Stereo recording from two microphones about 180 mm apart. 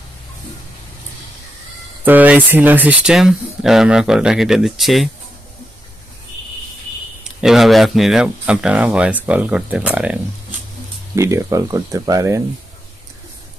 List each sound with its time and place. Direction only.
2.0 s speech: 10° right (ahead or behind)
7.4 s speech: centre (ahead or behind)
11.1 s speech: 15° right (ahead or behind)